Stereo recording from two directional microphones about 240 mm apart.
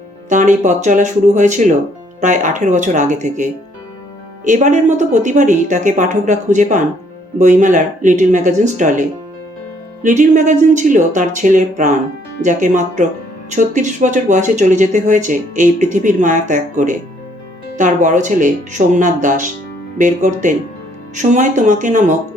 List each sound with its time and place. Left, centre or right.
0.3 s speech: right